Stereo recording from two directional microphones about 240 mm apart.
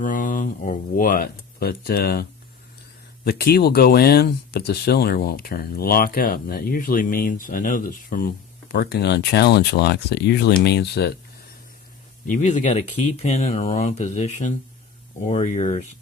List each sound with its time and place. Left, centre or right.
0.0 s speech: left
3.2 s speech: left
12.3 s speech: left